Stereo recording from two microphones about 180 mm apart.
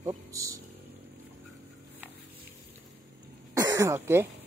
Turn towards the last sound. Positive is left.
turn(degrees=-15)  # may be behind; listen again after turning